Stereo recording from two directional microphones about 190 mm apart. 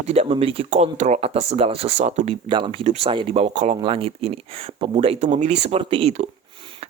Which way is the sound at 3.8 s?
25° right (ahead or behind).